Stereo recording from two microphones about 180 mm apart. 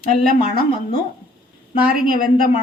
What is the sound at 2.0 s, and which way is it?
Speech, 55° right (ahead or behind).